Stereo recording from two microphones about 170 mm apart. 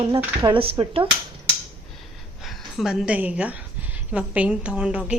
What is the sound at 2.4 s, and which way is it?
A woman's voice, centre (ahead or behind).